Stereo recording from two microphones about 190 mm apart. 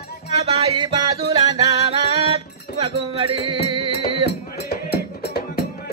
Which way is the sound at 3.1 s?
25° right (ahead or behind).